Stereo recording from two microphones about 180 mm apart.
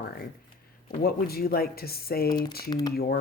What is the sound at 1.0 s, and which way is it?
Speech, 60° left (ahead or behind).